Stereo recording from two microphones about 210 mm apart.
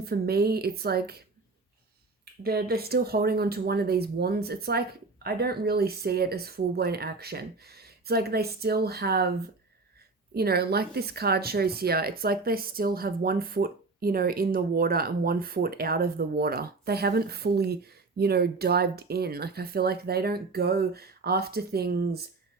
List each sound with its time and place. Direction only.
0.0 s speech: 50° right (ahead or behind)
2.4 s speech: 45° right (ahead or behind)
10.3 s speech: 50° right (ahead or behind)